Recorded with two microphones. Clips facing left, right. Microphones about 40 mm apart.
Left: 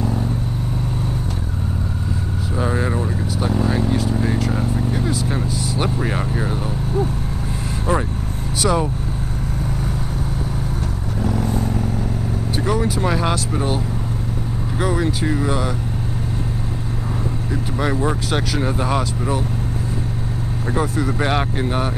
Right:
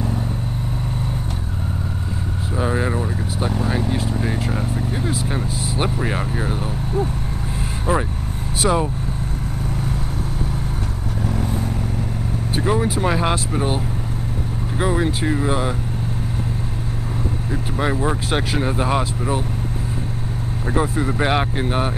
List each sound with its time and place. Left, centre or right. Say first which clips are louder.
2.5 s vehicle: even; centre
8.6 s speech: even; centre
11.2 s vehicle: left 3 dB; centre
12.5 s vehicle: right 1 dB; right
14.8 s speech: even; right
17.5 s speech: even; centre
20.7 s speech: right 1 dB; centre